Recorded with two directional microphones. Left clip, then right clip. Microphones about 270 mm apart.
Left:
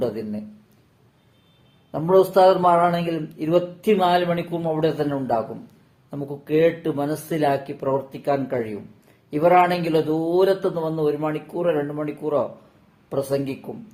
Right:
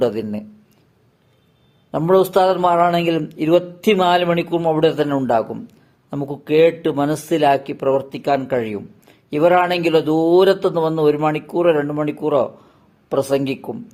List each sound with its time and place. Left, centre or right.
0.0 s a man's voice: right
1.9 s a man's voice: right